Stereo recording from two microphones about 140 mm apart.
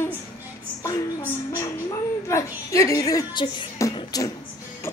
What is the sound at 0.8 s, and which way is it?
A woman's voice, 25° left (ahead or behind).